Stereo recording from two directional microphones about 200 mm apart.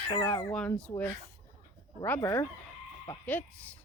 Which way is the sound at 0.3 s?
5° left (ahead or behind).